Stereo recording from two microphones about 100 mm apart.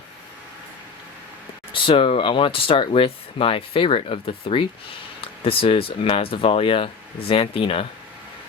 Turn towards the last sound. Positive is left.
turn(degrees=65)  # may be behind; listen again after turning